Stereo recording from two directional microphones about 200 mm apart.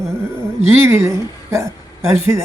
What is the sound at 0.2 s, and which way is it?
A man's voice, 15° right (ahead or behind).